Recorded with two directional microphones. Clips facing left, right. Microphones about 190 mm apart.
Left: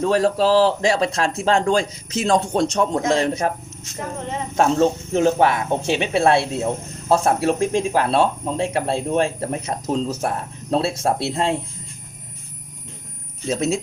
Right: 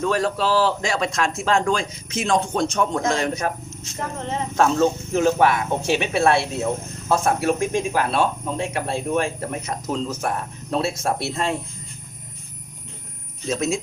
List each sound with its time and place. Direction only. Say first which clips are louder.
0.0 s speech: left 4 dB; 30° left (ahead or behind)
4.5 s speech: left 2 dB; 25° left (ahead or behind)
13.5 s speech: left 2 dB; 30° left (ahead or behind)